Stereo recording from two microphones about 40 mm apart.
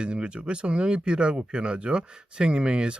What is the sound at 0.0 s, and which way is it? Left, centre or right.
Speech, right.